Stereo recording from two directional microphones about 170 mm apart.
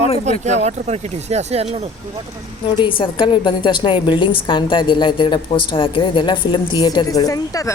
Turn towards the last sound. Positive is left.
turn(degrees=20)  # may be behind; listen again after turning